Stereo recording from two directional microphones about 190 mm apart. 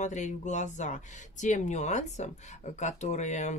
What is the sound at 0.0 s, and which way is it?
Speech, 40° left (ahead or behind).